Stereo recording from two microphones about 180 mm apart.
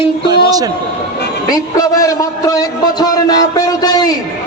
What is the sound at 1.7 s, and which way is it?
A man's voice, 20° left (ahead or behind).